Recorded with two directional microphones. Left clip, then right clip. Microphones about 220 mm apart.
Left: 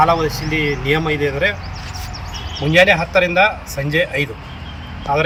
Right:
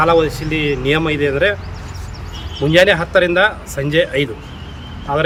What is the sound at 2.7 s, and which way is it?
Speech, 5° right (ahead or behind).